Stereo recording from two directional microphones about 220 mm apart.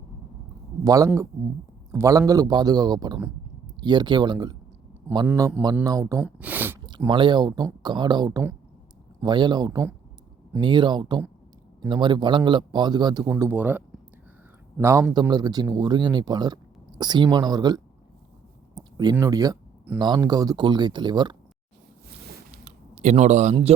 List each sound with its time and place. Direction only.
0.9 s a man's voice: 15° right (ahead or behind)
5.0 s a man's voice: 10° right (ahead or behind)
18.7 s a sound: 20° right (ahead or behind)
20.0 s a man's voice: 20° right (ahead or behind)
22.6 s speech: 30° right (ahead or behind)